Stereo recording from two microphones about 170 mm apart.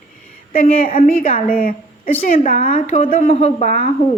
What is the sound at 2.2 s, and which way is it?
Speech, 50° left (ahead or behind).